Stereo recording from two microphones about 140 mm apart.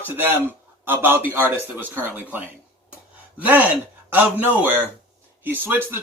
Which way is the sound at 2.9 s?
10° right (ahead or behind).